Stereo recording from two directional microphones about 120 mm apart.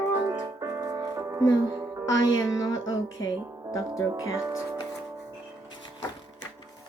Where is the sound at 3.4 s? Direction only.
25° right (ahead or behind).